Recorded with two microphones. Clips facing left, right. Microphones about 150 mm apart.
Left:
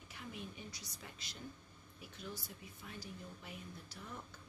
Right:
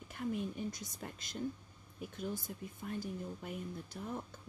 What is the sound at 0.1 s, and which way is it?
Speech, 50° right (ahead or behind).